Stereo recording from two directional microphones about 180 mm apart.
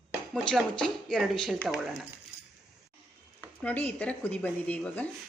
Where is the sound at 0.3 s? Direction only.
5° left (ahead or behind).